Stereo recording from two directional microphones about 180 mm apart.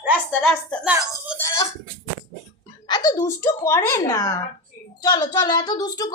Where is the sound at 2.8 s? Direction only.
20° left (ahead or behind).